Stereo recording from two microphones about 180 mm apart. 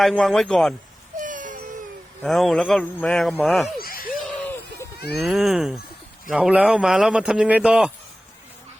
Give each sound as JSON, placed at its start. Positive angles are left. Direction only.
{"t": 0.0, "sound": "a man's voice", "side_deg": 0}
{"t": 1.2, "sound": "baby cry", "side_deg": -45}
{"t": 2.2, "sound": "a man's voice", "side_deg": 0}
{"t": 3.8, "sound": "a sound", "side_deg": 55}
{"t": 4.1, "sound": "a sound", "side_deg": 0}
{"t": 5.2, "sound": "a man's voice", "side_deg": 0}